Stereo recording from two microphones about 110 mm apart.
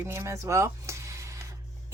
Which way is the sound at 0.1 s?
25° right (ahead or behind).